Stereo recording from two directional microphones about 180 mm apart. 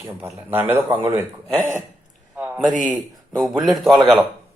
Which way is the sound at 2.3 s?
10° right (ahead or behind).